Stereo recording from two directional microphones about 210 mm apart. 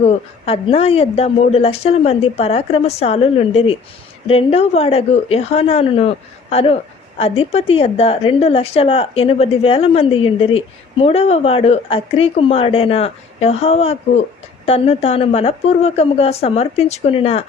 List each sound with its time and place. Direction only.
0.0 s a woman's voice: 25° left (ahead or behind)